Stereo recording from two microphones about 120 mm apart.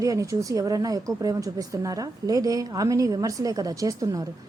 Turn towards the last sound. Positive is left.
turn(degrees=-30)  # may be behind; listen again after turning